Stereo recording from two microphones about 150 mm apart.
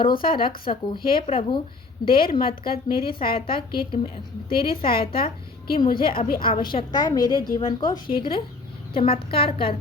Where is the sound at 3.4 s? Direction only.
35° left (ahead or behind).